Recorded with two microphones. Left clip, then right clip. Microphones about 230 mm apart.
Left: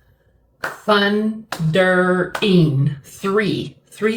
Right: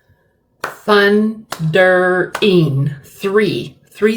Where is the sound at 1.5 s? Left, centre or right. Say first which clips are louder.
Right 5 dB; right.